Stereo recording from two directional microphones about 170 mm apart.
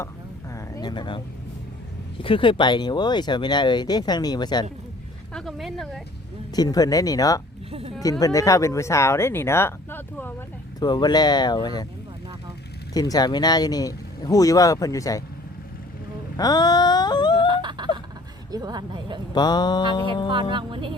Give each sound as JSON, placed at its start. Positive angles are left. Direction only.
{"t": 0.5, "sound": "a sound", "side_deg": 25}
{"t": 2.1, "sound": "speech", "side_deg": 30}
{"t": 5.3, "sound": "speech", "side_deg": 0}
{"t": 6.5, "sound": "speech", "side_deg": 20}
{"t": 7.7, "sound": "speech", "side_deg": -35}
{"t": 8.2, "sound": "speech", "side_deg": 20}
{"t": 10.8, "sound": "speech", "side_deg": 25}
{"t": 12.9, "sound": "speech", "side_deg": 20}
{"t": 16.4, "sound": "speech", "side_deg": 25}
{"t": 17.5, "sound": "a sound", "side_deg": -25}
{"t": 18.5, "sound": "speech", "side_deg": -25}
{"t": 19.3, "sound": "speech", "side_deg": 25}
{"t": 20.3, "sound": "speech", "side_deg": -30}